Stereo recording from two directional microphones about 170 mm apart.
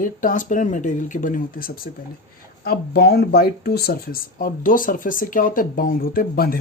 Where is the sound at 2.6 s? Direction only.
65° left (ahead or behind).